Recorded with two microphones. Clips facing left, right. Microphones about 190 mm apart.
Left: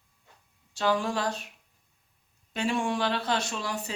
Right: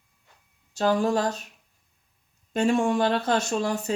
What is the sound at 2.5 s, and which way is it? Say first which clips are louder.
Speech: right 6 dB; 45° right (ahead or behind).